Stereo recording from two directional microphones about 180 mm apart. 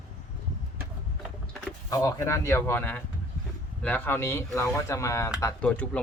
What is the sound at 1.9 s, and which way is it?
Speech, 20° left (ahead or behind).